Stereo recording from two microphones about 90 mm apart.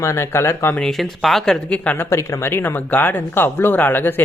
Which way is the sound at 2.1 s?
35° left (ahead or behind).